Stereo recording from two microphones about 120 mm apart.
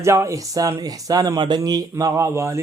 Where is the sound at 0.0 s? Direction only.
25° right (ahead or behind).